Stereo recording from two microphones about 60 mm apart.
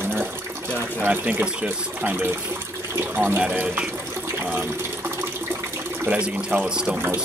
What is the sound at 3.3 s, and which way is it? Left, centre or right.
Speech, right.